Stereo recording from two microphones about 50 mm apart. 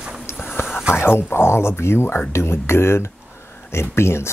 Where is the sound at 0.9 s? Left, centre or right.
Left.